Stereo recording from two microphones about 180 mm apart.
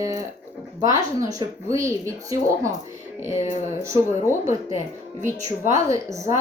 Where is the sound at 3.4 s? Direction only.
40° left (ahead or behind).